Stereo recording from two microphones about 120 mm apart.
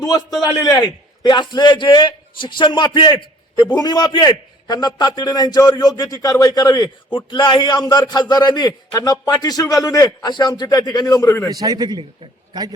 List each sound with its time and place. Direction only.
0.0 s a man's voice: 35° left (ahead or behind)
11.4 s a man's voice: 30° right (ahead or behind)